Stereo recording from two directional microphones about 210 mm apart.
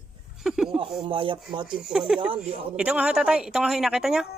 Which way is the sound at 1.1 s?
25° right (ahead or behind).